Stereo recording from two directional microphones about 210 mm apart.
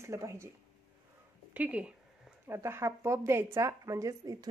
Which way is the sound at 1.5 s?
5° right (ahead or behind).